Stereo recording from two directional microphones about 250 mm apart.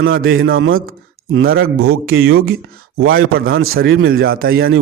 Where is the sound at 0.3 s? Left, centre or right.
Right.